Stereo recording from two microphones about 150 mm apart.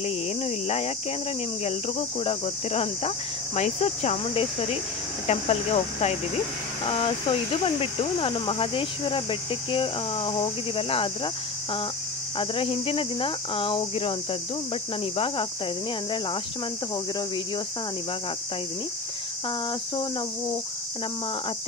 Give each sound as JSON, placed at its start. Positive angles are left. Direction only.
{"t": 0.0, "sound": "cricket", "side_deg": 45}
{"t": 1.6, "sound": "speech", "side_deg": 45}
{"t": 12.4, "sound": "speech", "side_deg": 35}